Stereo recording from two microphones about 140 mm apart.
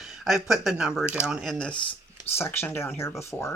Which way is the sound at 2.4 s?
15° left (ahead or behind).